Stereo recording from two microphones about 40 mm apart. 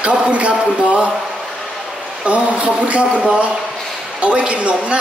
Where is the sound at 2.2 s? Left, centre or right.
Right.